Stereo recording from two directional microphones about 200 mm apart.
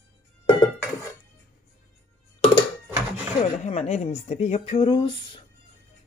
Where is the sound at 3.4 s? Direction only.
35° left (ahead or behind).